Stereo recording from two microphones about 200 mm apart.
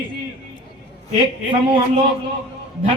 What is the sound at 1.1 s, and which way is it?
Speech, 25° right (ahead or behind).